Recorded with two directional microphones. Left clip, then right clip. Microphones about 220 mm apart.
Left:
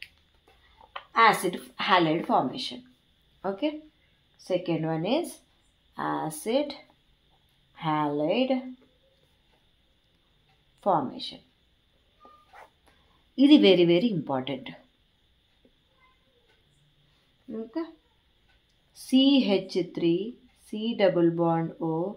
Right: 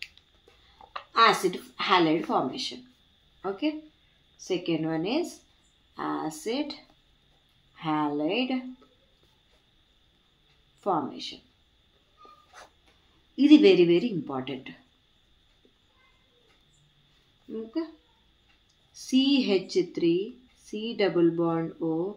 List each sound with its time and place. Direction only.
0.8 s a sound: centre (ahead or behind)
1.1 s a woman's voice: 30° left (ahead or behind)
10.8 s a woman's voice: 30° left (ahead or behind)
13.4 s a woman's voice: 35° left (ahead or behind)
17.8 s a woman's voice: 30° left (ahead or behind)
18.9 s a woman's voice: 30° left (ahead or behind)